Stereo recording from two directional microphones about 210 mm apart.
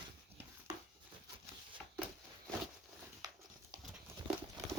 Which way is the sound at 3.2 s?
20° right (ahead or behind).